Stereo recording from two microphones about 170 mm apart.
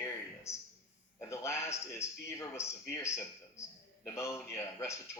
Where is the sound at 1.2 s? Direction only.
15° left (ahead or behind).